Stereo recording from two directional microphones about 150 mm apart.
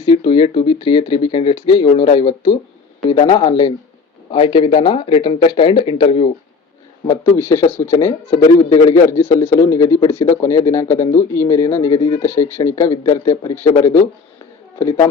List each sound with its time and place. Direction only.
0.0 s speech: 30° left (ahead or behind)
7.1 s speech: 15° left (ahead or behind)
12.2 s speech: 15° left (ahead or behind)
13.3 s speech: 30° left (ahead or behind)
13.7 s speech: 20° left (ahead or behind)